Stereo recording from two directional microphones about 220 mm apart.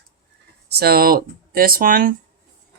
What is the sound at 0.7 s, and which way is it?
Speech, 45° right (ahead or behind).